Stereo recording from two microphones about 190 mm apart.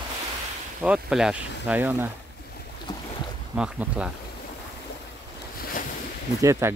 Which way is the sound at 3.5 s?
5° right (ahead or behind).